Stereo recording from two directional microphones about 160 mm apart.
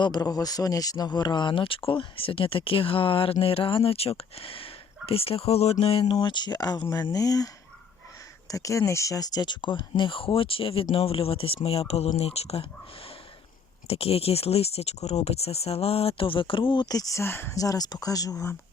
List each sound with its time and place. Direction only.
0.0 s speech: 25° left (ahead or behind); by 12.6 s 40° left (ahead or behind)
13.8 s speech: 40° left (ahead or behind); by 18.5 s 20° left (ahead or behind)